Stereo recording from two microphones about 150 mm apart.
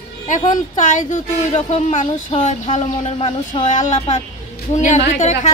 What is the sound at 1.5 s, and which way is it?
Speech, 45° left (ahead or behind).